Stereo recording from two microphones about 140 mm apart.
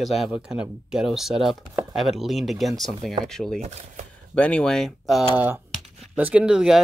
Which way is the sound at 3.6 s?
50° right (ahead or behind).